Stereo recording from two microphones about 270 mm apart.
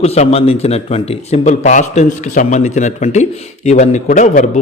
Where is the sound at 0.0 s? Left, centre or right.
Left.